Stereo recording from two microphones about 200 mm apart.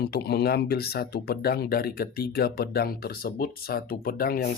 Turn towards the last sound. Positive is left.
turn(degrees=45)  # may be behind; listen again after turning